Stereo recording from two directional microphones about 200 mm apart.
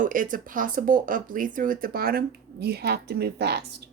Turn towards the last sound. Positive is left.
turn(degrees=-55)  # may be behind; listen again after turning